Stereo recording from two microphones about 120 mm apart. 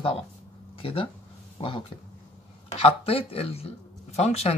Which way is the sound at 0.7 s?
50° left (ahead or behind).